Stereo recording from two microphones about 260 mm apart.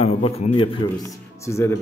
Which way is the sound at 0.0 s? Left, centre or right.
Left.